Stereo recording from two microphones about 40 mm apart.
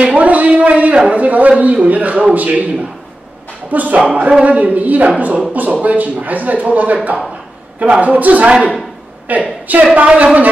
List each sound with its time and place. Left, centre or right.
0.0 s a man's voice: right